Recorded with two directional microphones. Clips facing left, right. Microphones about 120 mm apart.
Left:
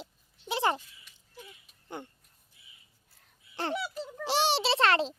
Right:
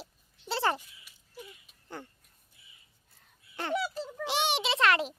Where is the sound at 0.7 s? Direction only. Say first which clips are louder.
Left 1 dB; 10° right (ahead or behind).